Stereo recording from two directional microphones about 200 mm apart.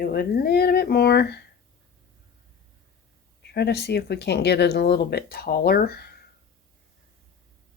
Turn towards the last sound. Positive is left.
turn(degrees=50)  # may be behind; listen again after turning